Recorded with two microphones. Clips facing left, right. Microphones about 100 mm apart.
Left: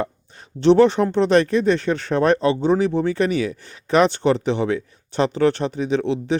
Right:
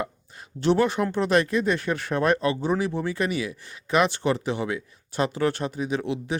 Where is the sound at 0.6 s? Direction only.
25° left (ahead or behind).